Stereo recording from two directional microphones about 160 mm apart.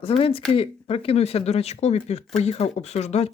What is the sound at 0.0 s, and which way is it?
Speech, 35° left (ahead or behind).